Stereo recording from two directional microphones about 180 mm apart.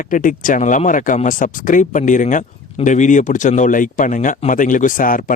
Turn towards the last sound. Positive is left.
turn(degrees=50)  # may be behind; listen again after turning